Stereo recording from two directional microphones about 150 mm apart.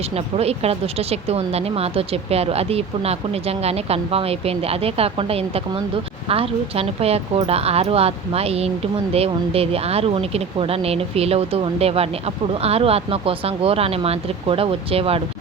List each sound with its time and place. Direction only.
0.3 s speech: 45° right (ahead or behind)